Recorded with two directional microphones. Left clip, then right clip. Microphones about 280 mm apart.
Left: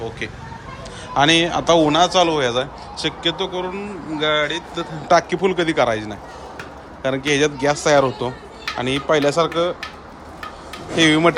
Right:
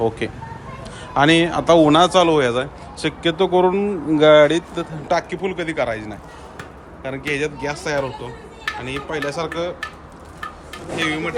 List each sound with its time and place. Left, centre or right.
0.2 s a man's voice: centre
10.9 s a man's voice: centre